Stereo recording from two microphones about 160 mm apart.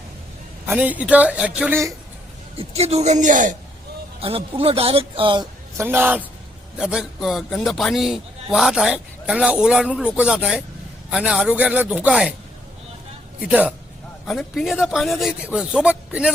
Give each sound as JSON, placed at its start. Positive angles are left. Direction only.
{"t": 0.7, "sound": "speech", "side_deg": -10}
{"t": 2.6, "sound": "a woman's voice", "side_deg": -40}
{"t": 4.2, "sound": "speech", "side_deg": -35}
{"t": 5.7, "sound": "a man's voice", "side_deg": -15}
{"t": 13.4, "sound": "a man's voice", "side_deg": -5}